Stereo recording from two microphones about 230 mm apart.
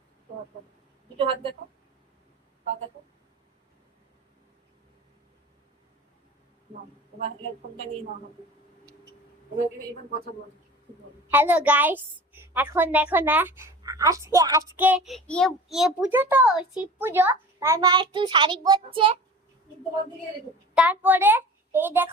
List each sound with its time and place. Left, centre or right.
1.2 s a woman's voice: right
11.3 s a woman's voice: centre
20.7 s a woman's voice: centre